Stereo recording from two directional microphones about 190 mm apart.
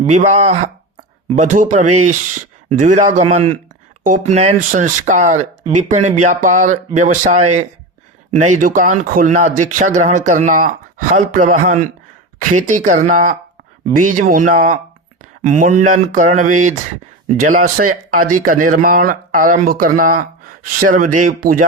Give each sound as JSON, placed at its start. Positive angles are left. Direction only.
{"t": 0.1, "sound": "speech", "side_deg": -40}